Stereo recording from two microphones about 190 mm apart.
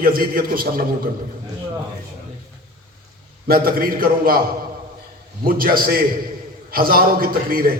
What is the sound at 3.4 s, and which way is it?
Speech, 50° right (ahead or behind).